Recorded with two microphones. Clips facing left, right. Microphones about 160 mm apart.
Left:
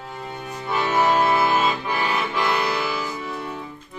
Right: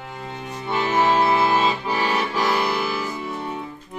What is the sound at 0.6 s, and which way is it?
Accordion, 25° right (ahead or behind).